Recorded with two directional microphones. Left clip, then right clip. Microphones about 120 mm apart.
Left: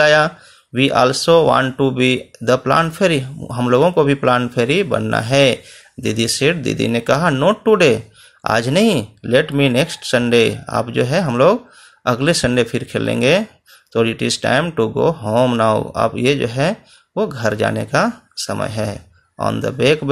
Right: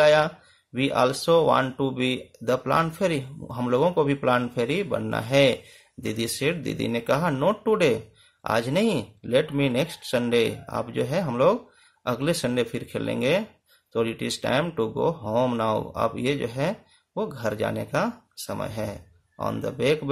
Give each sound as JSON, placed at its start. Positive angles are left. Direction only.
{"t": 0.0, "sound": "speech", "side_deg": 20}